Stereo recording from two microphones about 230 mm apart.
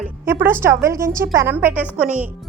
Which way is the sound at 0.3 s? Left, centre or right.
Centre.